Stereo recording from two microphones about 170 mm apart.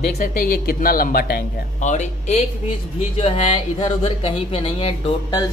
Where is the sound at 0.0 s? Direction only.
55° left (ahead or behind).